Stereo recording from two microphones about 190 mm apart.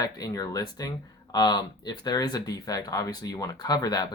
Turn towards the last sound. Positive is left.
turn(degrees=20)  # may be behind; listen again after turning